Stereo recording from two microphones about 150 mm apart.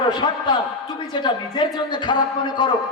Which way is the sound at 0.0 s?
30° left (ahead or behind).